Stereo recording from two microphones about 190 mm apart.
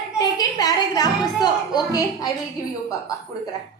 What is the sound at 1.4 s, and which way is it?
Speech, 20° left (ahead or behind).